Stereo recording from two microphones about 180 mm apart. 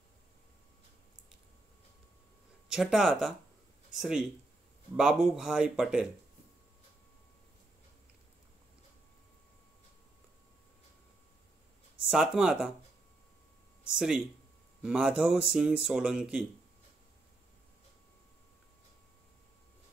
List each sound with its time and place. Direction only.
2.7 s speech: centre (ahead or behind)
12.1 s speech: 5° right (ahead or behind)
13.9 s speech: centre (ahead or behind)